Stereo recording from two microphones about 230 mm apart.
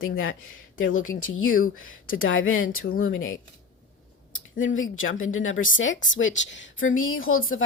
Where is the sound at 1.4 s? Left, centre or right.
Left.